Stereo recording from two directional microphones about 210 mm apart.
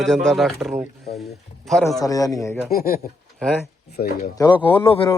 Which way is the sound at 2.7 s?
45° left (ahead or behind).